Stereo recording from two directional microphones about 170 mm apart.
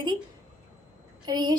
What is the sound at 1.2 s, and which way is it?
Speech, 25° right (ahead or behind).